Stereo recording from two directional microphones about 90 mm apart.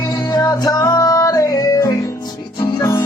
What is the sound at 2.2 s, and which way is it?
Music, 45° left (ahead or behind).